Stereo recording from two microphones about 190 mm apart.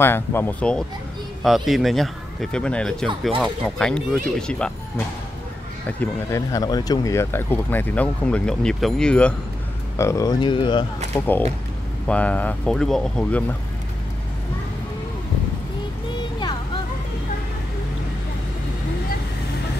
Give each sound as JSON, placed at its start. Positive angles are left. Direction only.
{"t": 0.0, "sound": "speech", "side_deg": 10}
{"t": 9.9, "sound": "speech", "side_deg": 15}
{"t": 11.1, "sound": "speech", "side_deg": 10}